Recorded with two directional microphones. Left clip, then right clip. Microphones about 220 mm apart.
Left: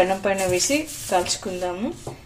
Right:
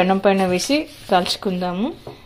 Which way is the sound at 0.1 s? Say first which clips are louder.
Right 5 dB; 35° right (ahead or behind).